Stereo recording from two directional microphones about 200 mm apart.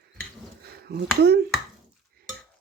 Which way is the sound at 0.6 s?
50° right (ahead or behind).